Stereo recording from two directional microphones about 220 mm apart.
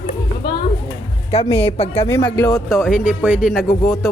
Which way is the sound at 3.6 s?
15° left (ahead or behind).